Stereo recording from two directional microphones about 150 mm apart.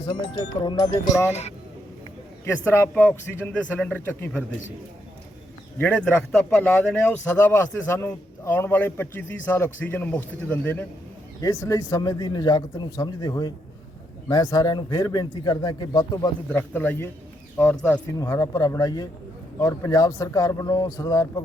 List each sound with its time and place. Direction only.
0.0 s speech: 30° left (ahead or behind)
1.3 s speech: 45° left (ahead or behind)
2.5 s a man's voice: 15° left (ahead or behind)
5.8 s a man's voice: 10° left (ahead or behind)
11.3 s speech: 20° left (ahead or behind)
16.5 s a man's voice: 15° left (ahead or behind)
18.1 s speech: 20° left (ahead or behind)